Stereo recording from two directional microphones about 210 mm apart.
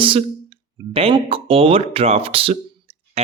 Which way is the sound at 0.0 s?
25° right (ahead or behind).